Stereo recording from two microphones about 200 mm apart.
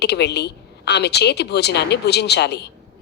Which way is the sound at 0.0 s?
55° left (ahead or behind).